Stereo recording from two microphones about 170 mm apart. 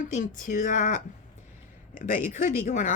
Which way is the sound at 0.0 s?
45° left (ahead or behind).